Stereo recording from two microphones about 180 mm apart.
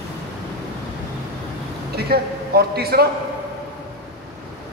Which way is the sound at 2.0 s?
60° right (ahead or behind).